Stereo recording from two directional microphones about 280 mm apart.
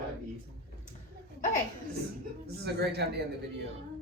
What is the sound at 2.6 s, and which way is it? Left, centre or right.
Speech, right.